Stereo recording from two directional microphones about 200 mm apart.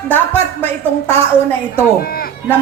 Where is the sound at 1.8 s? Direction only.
50° left (ahead or behind).